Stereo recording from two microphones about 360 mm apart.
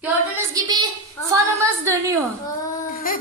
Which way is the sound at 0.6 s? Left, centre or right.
Centre.